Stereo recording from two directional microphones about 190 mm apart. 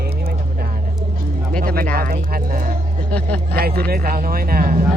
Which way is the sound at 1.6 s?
50° right (ahead or behind).